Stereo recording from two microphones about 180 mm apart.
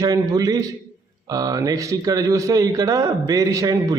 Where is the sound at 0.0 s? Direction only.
20° right (ahead or behind).